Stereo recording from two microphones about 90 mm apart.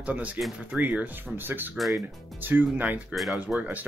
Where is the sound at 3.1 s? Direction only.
Centre (ahead or behind).